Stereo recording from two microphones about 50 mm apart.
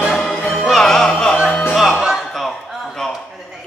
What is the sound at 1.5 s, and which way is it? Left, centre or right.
Music, left.